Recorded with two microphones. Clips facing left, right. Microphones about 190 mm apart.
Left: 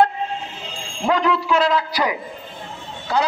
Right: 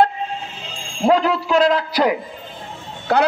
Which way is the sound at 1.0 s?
35° right (ahead or behind).